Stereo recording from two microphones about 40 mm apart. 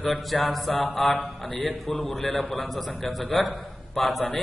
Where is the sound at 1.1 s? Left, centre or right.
Left.